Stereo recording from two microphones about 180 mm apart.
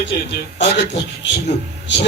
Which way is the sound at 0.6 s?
75° left (ahead or behind).